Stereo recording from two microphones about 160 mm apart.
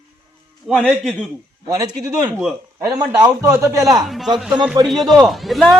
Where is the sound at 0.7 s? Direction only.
5° left (ahead or behind).